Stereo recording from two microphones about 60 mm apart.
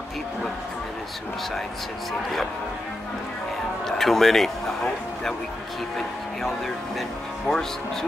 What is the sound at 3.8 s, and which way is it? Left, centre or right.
Speech, centre.